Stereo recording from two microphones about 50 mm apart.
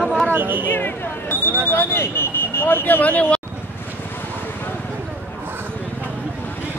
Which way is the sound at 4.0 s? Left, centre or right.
Left.